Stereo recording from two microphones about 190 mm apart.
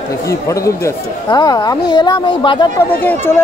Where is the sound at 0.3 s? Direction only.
15° left (ahead or behind).